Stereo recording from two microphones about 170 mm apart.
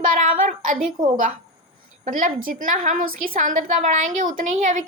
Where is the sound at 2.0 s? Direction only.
50° right (ahead or behind).